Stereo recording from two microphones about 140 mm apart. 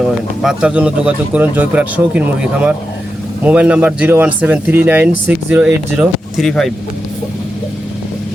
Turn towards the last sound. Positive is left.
turn(degrees=0)  # may be behind; listen again after turning